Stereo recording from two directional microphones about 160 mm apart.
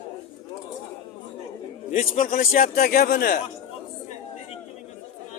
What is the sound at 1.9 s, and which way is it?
A man's voice, 50° left (ahead or behind).